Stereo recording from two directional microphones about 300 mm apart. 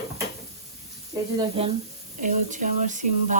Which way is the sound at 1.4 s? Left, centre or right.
Centre.